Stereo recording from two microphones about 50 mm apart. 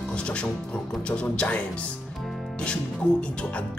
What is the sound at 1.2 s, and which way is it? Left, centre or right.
Speech, left.